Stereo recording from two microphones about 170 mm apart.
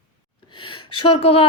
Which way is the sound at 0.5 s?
30° left (ahead or behind).